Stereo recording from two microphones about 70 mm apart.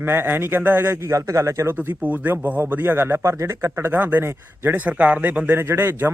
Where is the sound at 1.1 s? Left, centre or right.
Right.